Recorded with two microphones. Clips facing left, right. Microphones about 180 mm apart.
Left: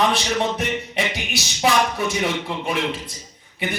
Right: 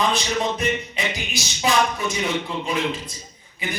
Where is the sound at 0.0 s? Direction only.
65° left (ahead or behind).